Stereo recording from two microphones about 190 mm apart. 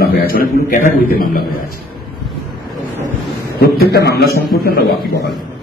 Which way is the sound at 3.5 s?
55° left (ahead or behind).